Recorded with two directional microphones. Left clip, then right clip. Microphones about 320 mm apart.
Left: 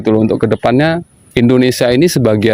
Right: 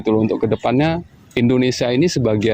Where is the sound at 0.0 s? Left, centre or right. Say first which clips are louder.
Left 5 dB; left.